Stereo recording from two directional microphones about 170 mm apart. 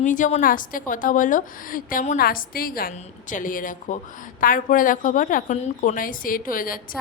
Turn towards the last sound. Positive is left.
turn(degrees=55)  # may be behind; listen again after turning